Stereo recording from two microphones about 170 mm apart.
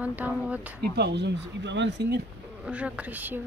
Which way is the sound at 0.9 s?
90° right.